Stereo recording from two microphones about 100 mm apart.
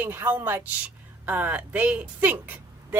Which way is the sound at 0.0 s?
20° right (ahead or behind).